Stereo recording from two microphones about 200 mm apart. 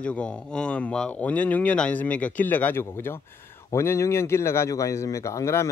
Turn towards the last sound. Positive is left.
turn(degrees=15)  # may be behind; listen again after turning